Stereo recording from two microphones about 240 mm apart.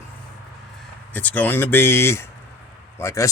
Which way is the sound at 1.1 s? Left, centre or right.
Centre.